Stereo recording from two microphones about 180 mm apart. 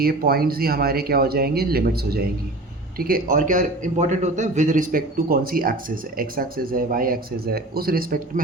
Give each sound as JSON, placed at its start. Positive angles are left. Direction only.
{"t": 0.0, "sound": "a man's voice", "side_deg": -55}